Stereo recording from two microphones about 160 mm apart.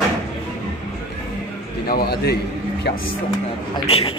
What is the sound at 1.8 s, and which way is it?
Speech, 75° left (ahead or behind).